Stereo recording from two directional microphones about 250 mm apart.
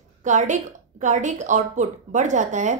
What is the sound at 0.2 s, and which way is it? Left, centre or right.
A woman's voice, right.